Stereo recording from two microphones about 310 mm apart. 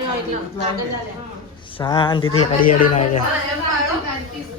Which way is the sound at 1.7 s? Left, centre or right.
Centre.